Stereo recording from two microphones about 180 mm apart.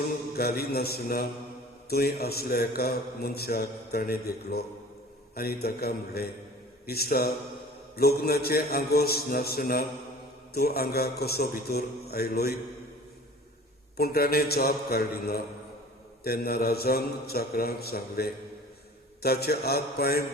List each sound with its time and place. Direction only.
0.3 s a man's voice: 60° left (ahead or behind)
13.9 s a man's voice: 60° left (ahead or behind)